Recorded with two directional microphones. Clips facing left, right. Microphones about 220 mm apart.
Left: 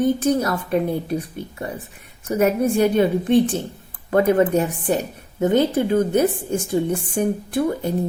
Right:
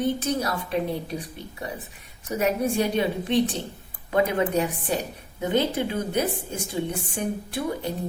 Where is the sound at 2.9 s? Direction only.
50° left (ahead or behind).